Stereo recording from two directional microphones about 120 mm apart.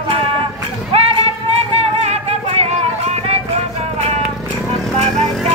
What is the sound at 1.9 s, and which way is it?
Music, 60° right (ahead or behind).